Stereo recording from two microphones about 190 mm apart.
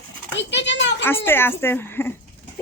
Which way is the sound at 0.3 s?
70° left (ahead or behind).